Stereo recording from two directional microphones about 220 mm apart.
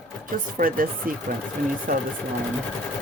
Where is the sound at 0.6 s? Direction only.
40° right (ahead or behind).